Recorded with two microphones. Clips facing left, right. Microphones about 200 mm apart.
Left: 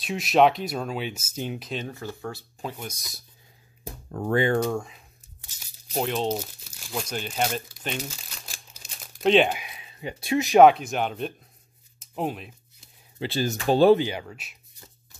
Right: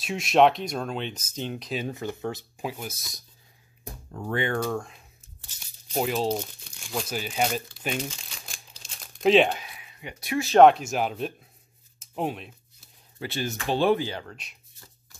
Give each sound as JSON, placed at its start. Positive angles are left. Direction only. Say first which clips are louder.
{"t": 0.0, "sound": "speech", "louder": "even", "side_deg": 0}
{"t": 1.9, "sound": "speech", "louder": "right 3 dB", "side_deg": -20}
{"t": 2.6, "sound": "speech", "louder": "right 1 dB", "side_deg": -5}
{"t": 4.1, "sound": "speech", "louder": "left 6 dB", "side_deg": 55}
{"t": 4.6, "sound": "speech", "louder": "left 2 dB", "side_deg": 5}
{"t": 8.0, "sound": "crumpling", "louder": "right 2 dB", "side_deg": 5}
{"t": 9.6, "sound": "speech", "louder": "left 4 dB", "side_deg": 20}
{"t": 10.6, "sound": "speech", "louder": "even", "side_deg": 0}
{"t": 13.3, "sound": "speech", "louder": "left 5 dB", "side_deg": 40}
{"t": 13.9, "sound": "speech", "louder": "left 3 dB", "side_deg": 15}